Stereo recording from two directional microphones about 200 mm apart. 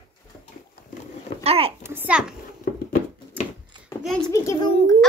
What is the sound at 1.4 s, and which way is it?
Speech, 30° right (ahead or behind).